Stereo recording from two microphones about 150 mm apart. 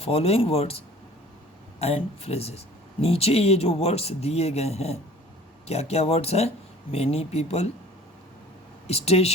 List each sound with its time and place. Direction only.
0.0 s speech: 40° left (ahead or behind)
1.8 s speech: 40° left (ahead or behind)
8.9 s speech: 45° left (ahead or behind)